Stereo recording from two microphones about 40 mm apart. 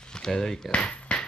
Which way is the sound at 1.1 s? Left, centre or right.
Left.